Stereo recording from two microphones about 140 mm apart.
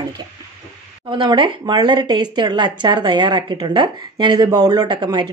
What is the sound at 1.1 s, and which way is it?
Speech, 35° right (ahead or behind).